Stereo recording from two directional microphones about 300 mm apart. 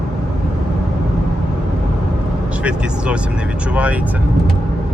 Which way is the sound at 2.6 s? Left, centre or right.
Centre.